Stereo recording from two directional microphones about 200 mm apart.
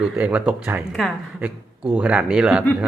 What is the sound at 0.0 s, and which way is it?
Speech, 5° right (ahead or behind).